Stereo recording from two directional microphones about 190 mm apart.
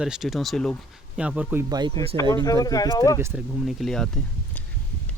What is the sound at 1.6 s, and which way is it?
Speech, 20° right (ahead or behind).